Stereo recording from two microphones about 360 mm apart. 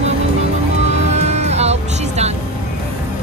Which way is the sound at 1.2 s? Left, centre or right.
Centre.